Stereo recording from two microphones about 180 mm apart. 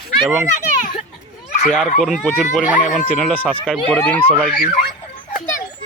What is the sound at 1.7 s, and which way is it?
Speech, 5° left (ahead or behind).